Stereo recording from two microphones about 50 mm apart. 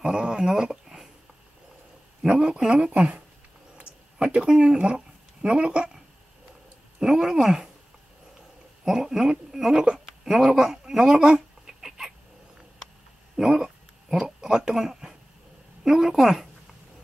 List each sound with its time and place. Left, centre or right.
0.0 s speech: centre
2.2 s speech: centre
4.2 s speech: centre
7.0 s a woman's voice: centre
9.9 s a sound: centre
13.4 s speech: centre